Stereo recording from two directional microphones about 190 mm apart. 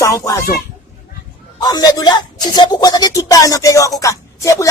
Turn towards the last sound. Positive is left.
turn(degrees=15)  # may be behind; listen again after turning